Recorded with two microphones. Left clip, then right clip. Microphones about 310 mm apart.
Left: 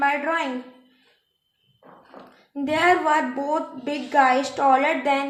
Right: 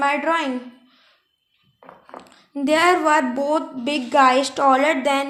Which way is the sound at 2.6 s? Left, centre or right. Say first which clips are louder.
Right 3 dB; right.